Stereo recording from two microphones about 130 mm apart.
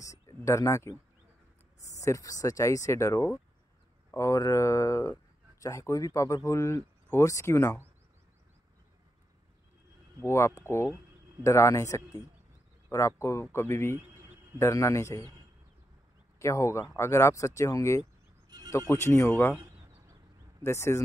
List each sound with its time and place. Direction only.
0.0 s speech: 25° left (ahead or behind)
2.0 s speech: 25° left (ahead or behind)
10.2 s speech: 20° left (ahead or behind)
16.3 s speech: 20° left (ahead or behind)
20.6 s speech: 20° left (ahead or behind)